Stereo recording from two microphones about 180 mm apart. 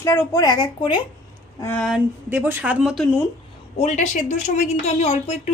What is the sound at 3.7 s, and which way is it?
A woman's voice, 40° left (ahead or behind).